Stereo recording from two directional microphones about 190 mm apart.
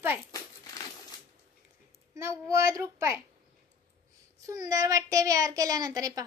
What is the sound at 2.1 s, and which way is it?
Speech, 15° right (ahead or behind).